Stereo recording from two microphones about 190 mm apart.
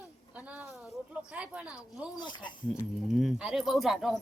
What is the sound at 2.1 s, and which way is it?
Speech, 25° left (ahead or behind).